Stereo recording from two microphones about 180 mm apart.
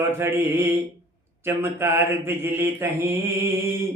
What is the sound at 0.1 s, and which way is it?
Mantra, 15° right (ahead or behind).